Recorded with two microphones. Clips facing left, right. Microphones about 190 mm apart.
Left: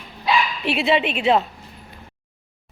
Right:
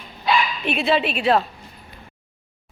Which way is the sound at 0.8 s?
20° left (ahead or behind).